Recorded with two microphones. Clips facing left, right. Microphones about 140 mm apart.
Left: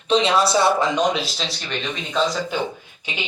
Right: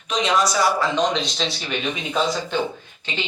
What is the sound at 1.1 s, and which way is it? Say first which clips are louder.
Speech: right 1 dB; 5° left (ahead or behind).